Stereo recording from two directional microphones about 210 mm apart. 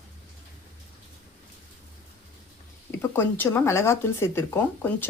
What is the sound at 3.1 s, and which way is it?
Speech, 10° left (ahead or behind).